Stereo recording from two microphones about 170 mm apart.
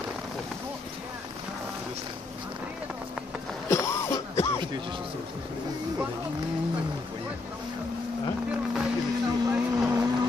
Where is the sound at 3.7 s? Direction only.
15° left (ahead or behind).